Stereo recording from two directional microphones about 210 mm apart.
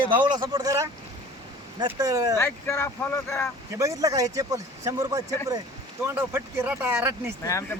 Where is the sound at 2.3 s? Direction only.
10° left (ahead or behind).